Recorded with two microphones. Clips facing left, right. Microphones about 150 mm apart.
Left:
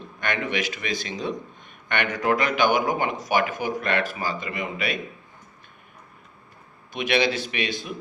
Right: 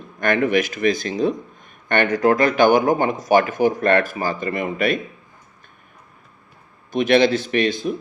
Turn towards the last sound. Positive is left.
turn(degrees=-50)  # may be behind; listen again after turning